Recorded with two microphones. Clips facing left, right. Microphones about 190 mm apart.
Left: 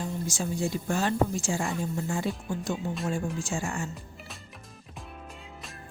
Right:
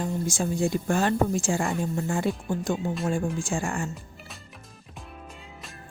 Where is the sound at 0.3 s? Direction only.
55° right (ahead or behind).